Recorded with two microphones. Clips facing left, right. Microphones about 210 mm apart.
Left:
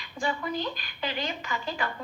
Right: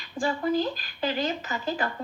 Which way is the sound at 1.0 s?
45° right (ahead or behind).